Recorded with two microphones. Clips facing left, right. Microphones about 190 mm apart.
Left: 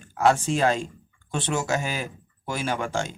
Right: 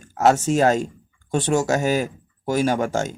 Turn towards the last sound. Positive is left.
turn(degrees=-40)  # may be behind; listen again after turning